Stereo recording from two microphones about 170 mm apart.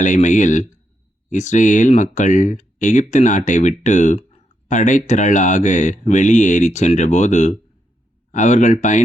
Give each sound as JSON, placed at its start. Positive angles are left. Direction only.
{"t": 0.0, "sound": "speech", "side_deg": 45}